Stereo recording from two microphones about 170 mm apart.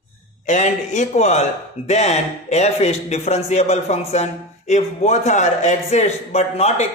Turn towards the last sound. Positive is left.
turn(degrees=40)  # may be behind; listen again after turning